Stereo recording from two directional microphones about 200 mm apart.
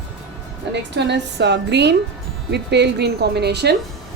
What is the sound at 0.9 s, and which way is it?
Speech, 60° right (ahead or behind).